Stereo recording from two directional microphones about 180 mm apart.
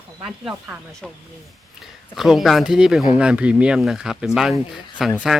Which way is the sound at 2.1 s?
Centre (ahead or behind).